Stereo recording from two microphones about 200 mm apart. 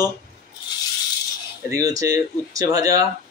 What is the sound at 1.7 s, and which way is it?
Speech, 15° right (ahead or behind).